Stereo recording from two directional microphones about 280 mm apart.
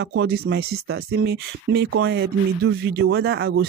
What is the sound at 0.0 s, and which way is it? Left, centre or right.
Speech, right.